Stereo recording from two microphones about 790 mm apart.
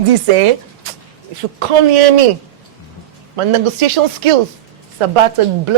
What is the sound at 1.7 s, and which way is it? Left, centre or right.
Speech, right.